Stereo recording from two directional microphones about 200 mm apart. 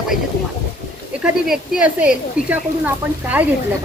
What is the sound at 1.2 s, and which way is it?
Speech, 5° right (ahead or behind).